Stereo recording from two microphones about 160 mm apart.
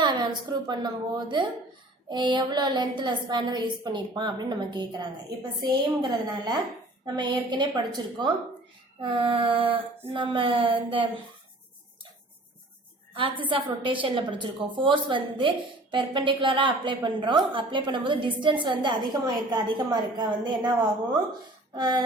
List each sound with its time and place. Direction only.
0.0 s a woman's voice: 30° right (ahead or behind)
13.1 s a woman's voice: 30° right (ahead or behind)